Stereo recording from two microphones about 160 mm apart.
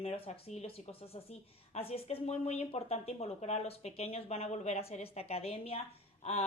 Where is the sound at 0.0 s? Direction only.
40° left (ahead or behind).